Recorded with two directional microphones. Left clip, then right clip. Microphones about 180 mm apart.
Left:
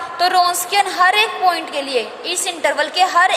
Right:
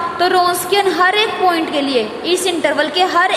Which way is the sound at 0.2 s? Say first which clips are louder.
Even; 25° left (ahead or behind).